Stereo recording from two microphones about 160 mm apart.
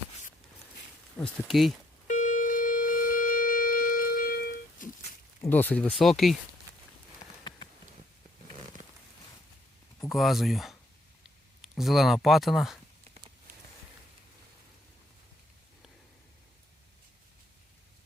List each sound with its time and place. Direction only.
1.2 s speech: centre (ahead or behind)
2.0 s shofar: 55° left (ahead or behind); by 4.9 s 70° left (ahead or behind)
5.4 s speech: 10° left (ahead or behind)
10.1 s speech: centre (ahead or behind)